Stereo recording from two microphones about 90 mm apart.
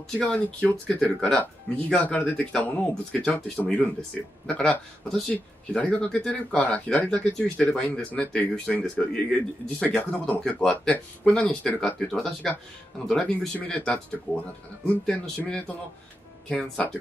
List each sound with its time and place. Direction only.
0.2 s speech: 15° left (ahead or behind)
9.8 s speech: 15° left (ahead or behind)